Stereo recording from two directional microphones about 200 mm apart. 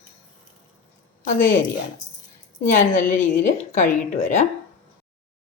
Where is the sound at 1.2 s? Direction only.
40° left (ahead or behind).